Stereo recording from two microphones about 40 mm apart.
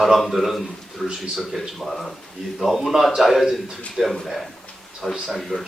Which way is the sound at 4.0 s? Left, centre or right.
Right.